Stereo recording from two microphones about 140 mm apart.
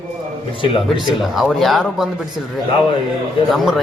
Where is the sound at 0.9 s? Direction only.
Centre (ahead or behind).